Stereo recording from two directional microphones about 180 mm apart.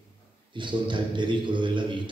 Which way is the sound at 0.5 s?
25° right (ahead or behind).